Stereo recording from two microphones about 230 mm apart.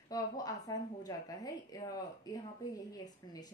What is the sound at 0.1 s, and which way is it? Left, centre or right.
Speech, centre.